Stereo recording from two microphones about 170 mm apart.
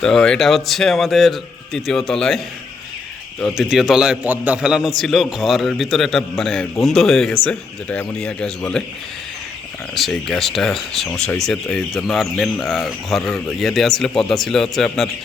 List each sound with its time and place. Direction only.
0.0 s speech: 5° left (ahead or behind)
3.4 s speech: centre (ahead or behind)
9.9 s speech: centre (ahead or behind)